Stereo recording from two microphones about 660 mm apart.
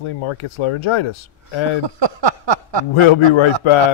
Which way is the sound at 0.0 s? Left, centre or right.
Left.